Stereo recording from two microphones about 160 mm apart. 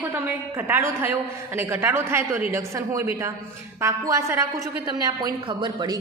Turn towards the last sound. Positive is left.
turn(degrees=-25)  # may be behind; listen again after turning